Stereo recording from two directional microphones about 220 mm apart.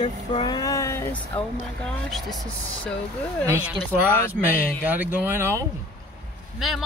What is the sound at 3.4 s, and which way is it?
Speech, 10° right (ahead or behind).